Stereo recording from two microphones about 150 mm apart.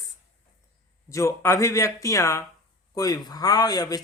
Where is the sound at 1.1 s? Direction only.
20° left (ahead or behind).